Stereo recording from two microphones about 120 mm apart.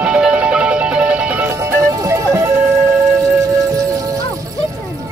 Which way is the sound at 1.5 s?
25° right (ahead or behind).